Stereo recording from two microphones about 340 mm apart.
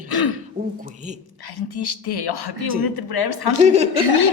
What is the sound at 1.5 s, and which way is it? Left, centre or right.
Speech, left.